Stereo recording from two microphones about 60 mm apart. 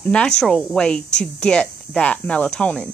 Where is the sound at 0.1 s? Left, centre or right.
Centre.